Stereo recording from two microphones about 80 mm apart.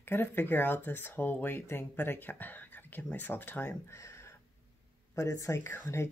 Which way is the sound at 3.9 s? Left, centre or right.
Left.